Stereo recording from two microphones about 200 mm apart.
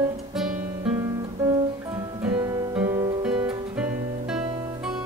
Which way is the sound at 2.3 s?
15° right (ahead or behind).